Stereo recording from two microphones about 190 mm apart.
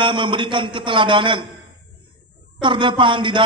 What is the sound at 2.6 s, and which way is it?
Speech, 25° right (ahead or behind).